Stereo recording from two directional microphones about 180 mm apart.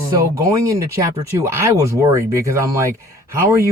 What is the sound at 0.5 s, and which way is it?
Speech, 15° right (ahead or behind).